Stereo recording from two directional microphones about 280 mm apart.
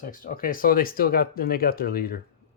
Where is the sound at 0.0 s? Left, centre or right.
Left.